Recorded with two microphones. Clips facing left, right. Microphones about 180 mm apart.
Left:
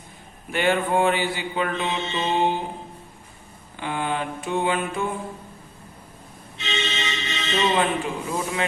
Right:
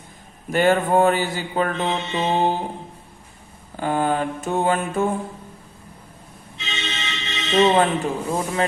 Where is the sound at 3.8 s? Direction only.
40° right (ahead or behind).